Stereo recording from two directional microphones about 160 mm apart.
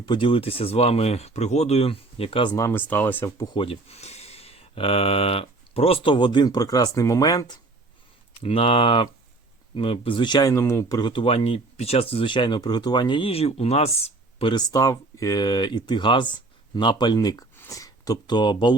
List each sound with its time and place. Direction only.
0.0 s speech: 30° left (ahead or behind)
2.6 s speech: 15° left (ahead or behind)
3.5 s speech: 35° left (ahead or behind)
8.4 s speech: 35° left (ahead or behind)